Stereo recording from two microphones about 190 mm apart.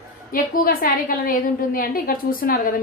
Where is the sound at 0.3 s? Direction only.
50° left (ahead or behind).